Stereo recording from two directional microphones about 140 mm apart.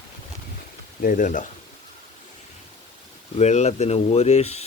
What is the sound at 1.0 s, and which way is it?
Speech, 65° left (ahead or behind).